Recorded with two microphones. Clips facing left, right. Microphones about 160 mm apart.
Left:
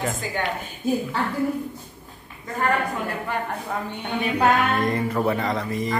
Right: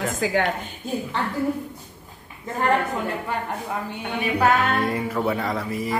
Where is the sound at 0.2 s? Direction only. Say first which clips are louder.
Right 8 dB; 90° right.